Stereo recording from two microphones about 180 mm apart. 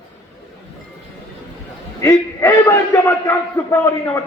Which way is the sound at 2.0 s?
15° left (ahead or behind).